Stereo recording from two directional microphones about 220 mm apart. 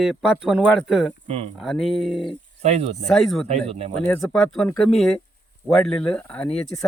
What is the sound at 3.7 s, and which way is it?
Speech, 25° right (ahead or behind).